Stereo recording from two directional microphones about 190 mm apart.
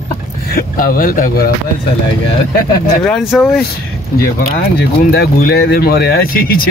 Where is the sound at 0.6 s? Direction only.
45° left (ahead or behind).